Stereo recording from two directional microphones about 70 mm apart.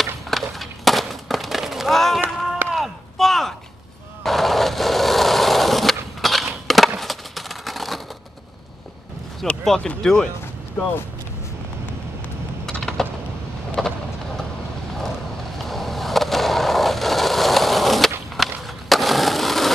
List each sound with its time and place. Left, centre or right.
0.0 s a sound: centre
4.2 s skateboard: centre
7.0 s a sound: centre
9.5 s speech: centre
12.6 s typing: centre
13.7 s vehicle: centre
15.0 s skateboard: centre